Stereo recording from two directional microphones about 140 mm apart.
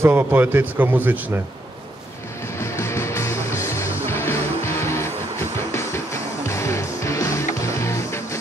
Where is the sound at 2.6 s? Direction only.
20° left (ahead or behind).